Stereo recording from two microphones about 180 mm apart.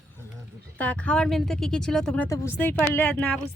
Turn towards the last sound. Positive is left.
turn(degrees=10)  # may be behind; listen again after turning